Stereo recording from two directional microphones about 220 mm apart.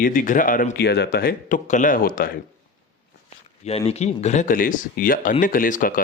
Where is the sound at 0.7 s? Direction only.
50° left (ahead or behind).